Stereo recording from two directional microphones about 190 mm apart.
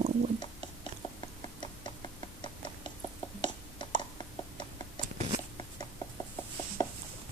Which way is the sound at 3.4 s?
25° left (ahead or behind).